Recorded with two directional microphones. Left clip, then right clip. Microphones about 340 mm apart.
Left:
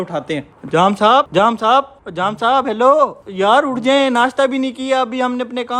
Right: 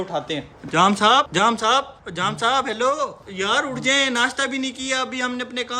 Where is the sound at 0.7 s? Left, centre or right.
Centre.